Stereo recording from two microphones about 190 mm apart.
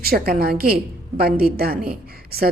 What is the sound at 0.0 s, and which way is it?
A woman's voice, 55° right (ahead or behind).